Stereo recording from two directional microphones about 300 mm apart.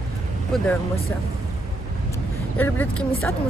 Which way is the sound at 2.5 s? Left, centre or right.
Centre.